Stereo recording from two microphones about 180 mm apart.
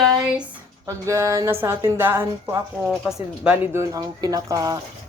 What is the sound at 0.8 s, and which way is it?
A woman's voice, 15° right (ahead or behind).